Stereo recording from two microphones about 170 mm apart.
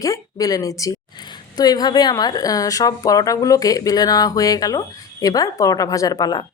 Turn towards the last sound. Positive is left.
turn(degrees=20)  # may be behind; listen again after turning